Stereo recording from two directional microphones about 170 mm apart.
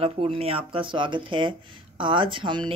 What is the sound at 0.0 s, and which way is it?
A woman's voice, 35° right (ahead or behind).